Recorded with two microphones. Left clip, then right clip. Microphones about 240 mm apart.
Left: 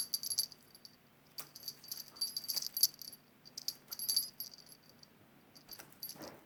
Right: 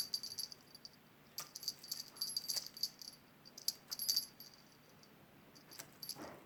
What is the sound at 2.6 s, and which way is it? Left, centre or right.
Rattle, left.